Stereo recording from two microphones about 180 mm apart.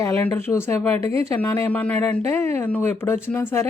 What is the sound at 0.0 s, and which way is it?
Speech, 10° left (ahead or behind).